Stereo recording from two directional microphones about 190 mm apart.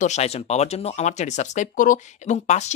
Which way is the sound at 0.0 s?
35° left (ahead or behind).